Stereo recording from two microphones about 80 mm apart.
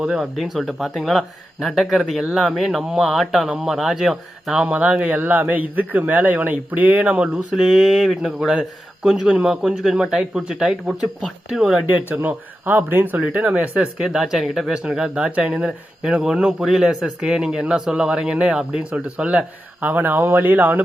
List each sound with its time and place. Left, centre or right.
0.0 s speech: centre
7.5 s speech: centre
11.9 s speech: right